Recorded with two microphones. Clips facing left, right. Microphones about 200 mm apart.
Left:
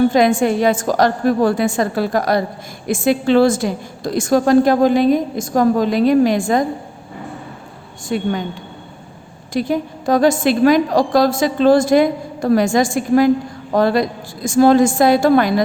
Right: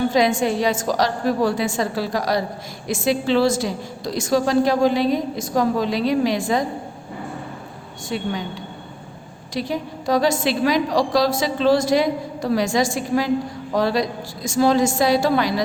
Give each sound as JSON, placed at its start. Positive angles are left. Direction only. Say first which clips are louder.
{"t": 0.1, "sound": "a woman's voice", "louder": "left 4 dB", "side_deg": 55}
{"t": 8.1, "sound": "a woman's voice", "louder": "left 6 dB", "side_deg": 50}
{"t": 9.5, "sound": "a woman's voice", "louder": "left 6 dB", "side_deg": 50}